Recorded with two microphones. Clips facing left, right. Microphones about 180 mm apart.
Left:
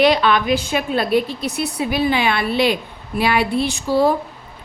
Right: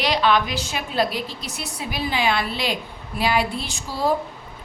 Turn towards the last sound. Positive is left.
turn(degrees=65)  # may be behind; listen again after turning